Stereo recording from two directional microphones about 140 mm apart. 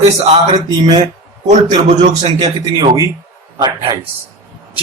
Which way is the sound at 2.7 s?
30° right (ahead or behind).